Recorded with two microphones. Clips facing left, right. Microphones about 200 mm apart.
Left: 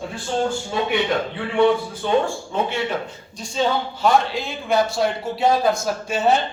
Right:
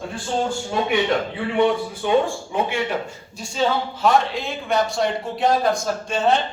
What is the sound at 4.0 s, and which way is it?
Speech, centre (ahead or behind).